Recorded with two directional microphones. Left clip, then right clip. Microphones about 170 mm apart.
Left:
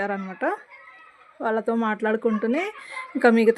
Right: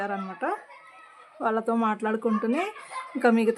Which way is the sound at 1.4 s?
15° left (ahead or behind).